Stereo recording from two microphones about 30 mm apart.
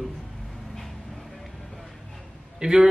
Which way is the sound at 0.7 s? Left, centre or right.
Centre.